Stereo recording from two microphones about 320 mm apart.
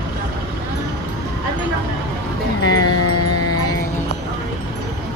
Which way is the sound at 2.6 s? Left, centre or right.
Left.